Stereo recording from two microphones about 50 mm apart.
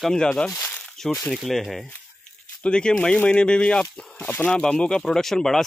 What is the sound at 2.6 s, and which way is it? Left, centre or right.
Speech, centre.